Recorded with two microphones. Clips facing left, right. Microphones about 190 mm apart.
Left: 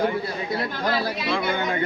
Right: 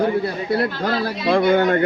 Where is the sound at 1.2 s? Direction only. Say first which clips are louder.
Right 9 dB; 55° right (ahead or behind).